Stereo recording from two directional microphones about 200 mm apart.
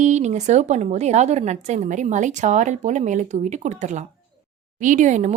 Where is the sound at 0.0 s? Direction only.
35° right (ahead or behind).